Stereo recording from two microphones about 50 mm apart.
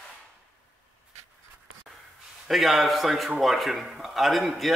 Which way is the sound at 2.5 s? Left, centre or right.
Centre.